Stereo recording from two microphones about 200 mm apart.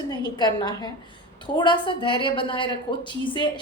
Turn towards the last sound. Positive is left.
turn(degrees=25)  # may be behind; listen again after turning